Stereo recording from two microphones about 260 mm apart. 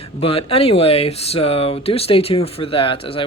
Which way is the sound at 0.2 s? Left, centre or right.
Left.